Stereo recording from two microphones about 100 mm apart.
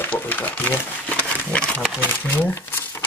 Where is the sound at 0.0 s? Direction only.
20° left (ahead or behind).